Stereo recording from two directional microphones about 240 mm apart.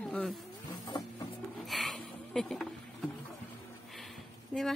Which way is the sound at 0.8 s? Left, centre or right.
Centre.